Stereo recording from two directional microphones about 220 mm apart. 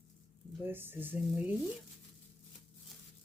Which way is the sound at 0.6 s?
10° right (ahead or behind).